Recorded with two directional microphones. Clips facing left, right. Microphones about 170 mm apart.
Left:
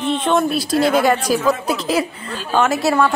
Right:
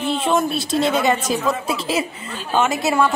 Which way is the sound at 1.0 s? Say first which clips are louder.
Left 3 dB; 20° right (ahead or behind).